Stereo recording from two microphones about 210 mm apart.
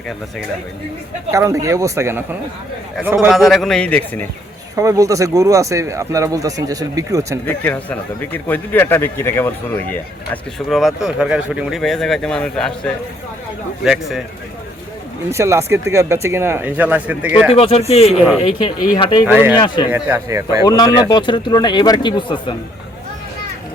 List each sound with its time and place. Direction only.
1.3 s speech: 15° right (ahead or behind)
3.3 s speech: centre (ahead or behind)
4.8 s speech: 15° right (ahead or behind)
7.4 s a man's voice: 10° left (ahead or behind)
15.3 s speech: 15° right (ahead or behind)
17.5 s speech: 30° left (ahead or behind)
18.1 s speech: 5° right (ahead or behind)
18.9 s speech: 25° left (ahead or behind)
19.3 s speech: 10° right (ahead or behind)
19.5 s speech: 20° left (ahead or behind)
19.9 s speech: 10° right (ahead or behind)
20.7 s speech: 20° left (ahead or behind)